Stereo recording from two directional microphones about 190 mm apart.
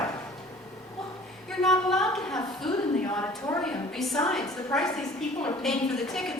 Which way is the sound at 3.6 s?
Centre (ahead or behind).